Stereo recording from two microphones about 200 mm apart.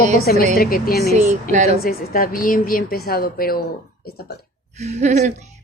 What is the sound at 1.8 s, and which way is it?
Speech, 45° left (ahead or behind).